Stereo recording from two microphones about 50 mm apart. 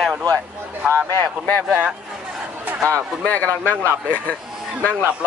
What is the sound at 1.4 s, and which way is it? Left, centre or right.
Speech, left.